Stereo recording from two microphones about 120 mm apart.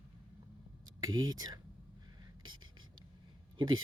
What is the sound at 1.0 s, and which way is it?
Speech, 30° right (ahead or behind).